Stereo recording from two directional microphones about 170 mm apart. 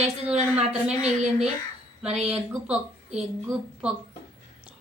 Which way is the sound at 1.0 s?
40° right (ahead or behind).